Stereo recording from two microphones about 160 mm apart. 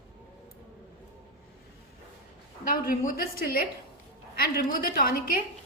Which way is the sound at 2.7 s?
60° left (ahead or behind).